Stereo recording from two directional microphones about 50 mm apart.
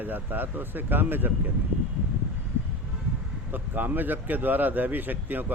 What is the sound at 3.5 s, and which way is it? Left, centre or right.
Speech, right.